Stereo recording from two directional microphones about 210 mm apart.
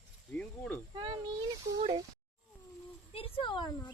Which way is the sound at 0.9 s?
20° right (ahead or behind).